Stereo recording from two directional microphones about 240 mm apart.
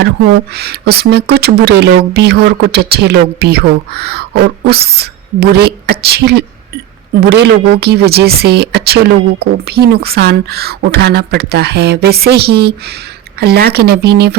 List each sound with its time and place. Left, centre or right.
0.0 s speech: right